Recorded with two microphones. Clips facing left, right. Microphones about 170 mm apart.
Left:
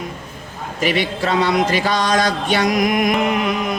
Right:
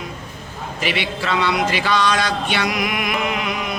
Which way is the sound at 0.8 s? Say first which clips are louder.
Left 5 dB; 45° left (ahead or behind).